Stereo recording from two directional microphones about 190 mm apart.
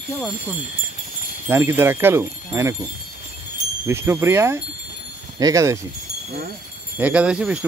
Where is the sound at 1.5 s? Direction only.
15° right (ahead or behind).